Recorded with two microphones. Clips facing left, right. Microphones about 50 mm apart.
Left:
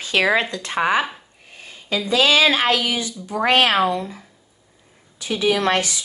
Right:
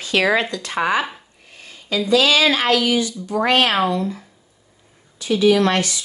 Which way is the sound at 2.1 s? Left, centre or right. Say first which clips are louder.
Right 1 dB; left.